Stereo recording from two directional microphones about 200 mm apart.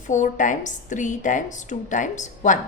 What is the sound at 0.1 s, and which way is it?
A woman's voice, 40° left (ahead or behind).